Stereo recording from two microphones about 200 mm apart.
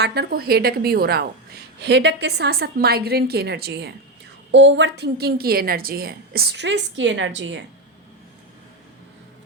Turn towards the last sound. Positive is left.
turn(degrees=-65)  # may be behind; listen again after turning